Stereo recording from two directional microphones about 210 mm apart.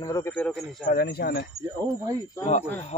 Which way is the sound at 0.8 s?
45° left (ahead or behind).